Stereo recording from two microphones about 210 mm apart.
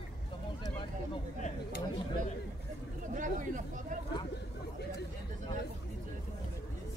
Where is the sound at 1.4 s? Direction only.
35° left (ahead or behind).